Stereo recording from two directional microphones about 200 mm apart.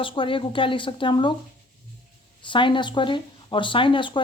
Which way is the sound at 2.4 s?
25° left (ahead or behind).